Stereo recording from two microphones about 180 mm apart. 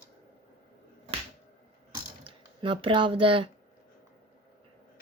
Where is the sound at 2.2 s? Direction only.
30° right (ahead or behind).